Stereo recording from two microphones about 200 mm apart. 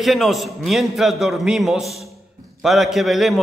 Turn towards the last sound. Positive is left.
turn(degrees=0)  # may be behind; listen again after turning